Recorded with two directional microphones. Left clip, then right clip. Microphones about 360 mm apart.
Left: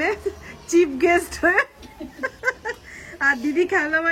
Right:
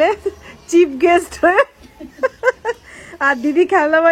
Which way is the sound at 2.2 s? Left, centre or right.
Centre.